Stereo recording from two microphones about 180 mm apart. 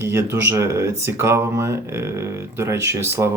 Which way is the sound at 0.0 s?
15° right (ahead or behind).